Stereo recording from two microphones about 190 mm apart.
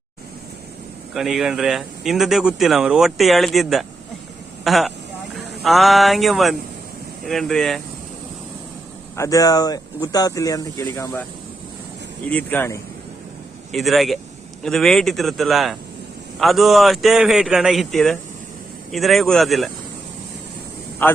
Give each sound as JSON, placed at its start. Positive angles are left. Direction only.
{"t": 1.1, "sound": "speech", "side_deg": 0}
{"t": 9.1, "sound": "speech", "side_deg": 15}
{"t": 12.3, "sound": "speech", "side_deg": 10}
{"t": 13.7, "sound": "speech", "side_deg": 0}
{"t": 21.0, "sound": "speech", "side_deg": 10}